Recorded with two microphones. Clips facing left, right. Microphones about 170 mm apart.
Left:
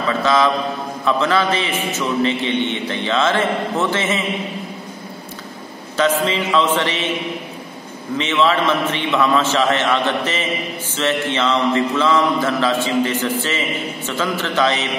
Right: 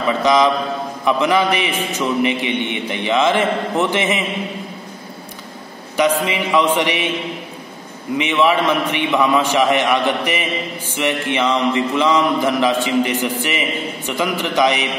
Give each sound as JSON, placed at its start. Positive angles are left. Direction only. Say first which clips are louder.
{"t": 0.2, "sound": "a man's voice", "louder": "right 2 dB", "side_deg": -15}
{"t": 5.9, "sound": "a man's voice", "louder": "right 1 dB", "side_deg": -15}
{"t": 8.2, "sound": "a man's voice", "louder": "right 1 dB", "side_deg": -15}